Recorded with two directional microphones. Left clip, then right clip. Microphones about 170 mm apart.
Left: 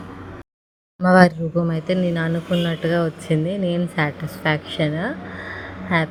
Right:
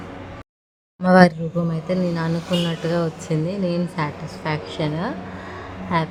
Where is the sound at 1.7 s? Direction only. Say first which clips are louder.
Left 2 dB; 20° left (ahead or behind).